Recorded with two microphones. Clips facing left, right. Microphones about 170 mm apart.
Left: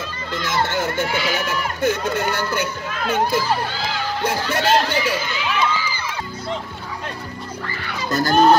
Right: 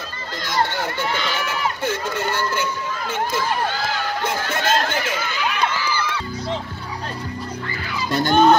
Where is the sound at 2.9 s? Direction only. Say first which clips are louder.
Left 4 dB; 60° left (ahead or behind).